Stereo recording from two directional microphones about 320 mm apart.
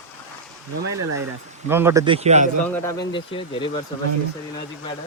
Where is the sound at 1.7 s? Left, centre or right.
Centre.